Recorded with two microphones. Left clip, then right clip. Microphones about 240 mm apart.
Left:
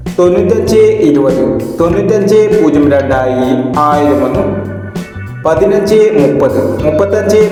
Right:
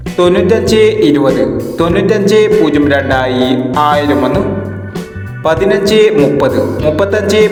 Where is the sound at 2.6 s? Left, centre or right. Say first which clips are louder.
Left 2 dB; right.